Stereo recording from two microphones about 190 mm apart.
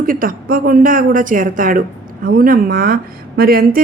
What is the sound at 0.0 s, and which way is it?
A woman's voice, 45° right (ahead or behind).